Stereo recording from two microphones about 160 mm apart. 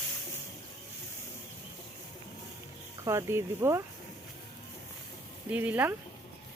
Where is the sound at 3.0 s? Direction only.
20° right (ahead or behind).